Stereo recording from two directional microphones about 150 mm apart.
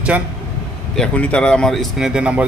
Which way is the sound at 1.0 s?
5° left (ahead or behind).